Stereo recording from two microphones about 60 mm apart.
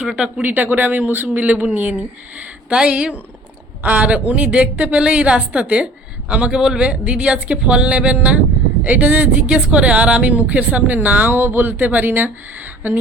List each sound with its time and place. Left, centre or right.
0.0 s speech: centre
0.4 s a woman's voice: right